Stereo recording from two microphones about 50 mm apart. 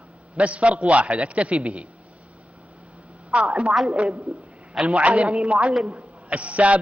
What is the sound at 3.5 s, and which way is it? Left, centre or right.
Speech, centre.